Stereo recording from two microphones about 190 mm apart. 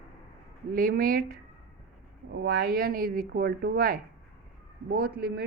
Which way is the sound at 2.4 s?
55° right (ahead or behind).